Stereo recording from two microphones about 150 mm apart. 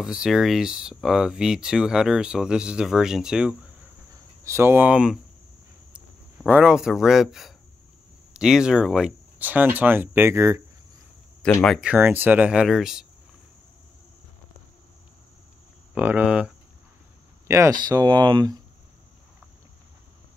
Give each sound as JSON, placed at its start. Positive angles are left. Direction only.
{"t": 0.0, "sound": "speech", "side_deg": -5}
{"t": 4.5, "sound": "speech", "side_deg": -15}
{"t": 11.4, "sound": "speech", "side_deg": 5}
{"t": 11.8, "sound": "speech", "side_deg": -10}
{"t": 15.9, "sound": "speech", "side_deg": -10}
{"t": 17.5, "sound": "speech", "side_deg": -20}